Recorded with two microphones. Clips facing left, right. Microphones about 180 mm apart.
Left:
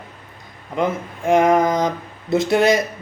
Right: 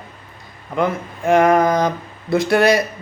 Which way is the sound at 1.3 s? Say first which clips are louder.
Right 1 dB; 15° left (ahead or behind).